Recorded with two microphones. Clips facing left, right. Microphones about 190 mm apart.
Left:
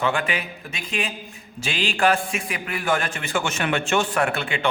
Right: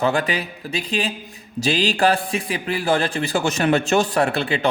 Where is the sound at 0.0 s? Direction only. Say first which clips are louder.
Right 4 dB; 40° right (ahead or behind).